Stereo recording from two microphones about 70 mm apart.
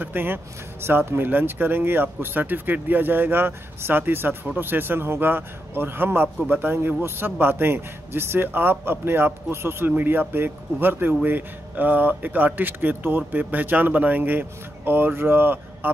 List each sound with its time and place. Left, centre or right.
0.0 s a man's voice: right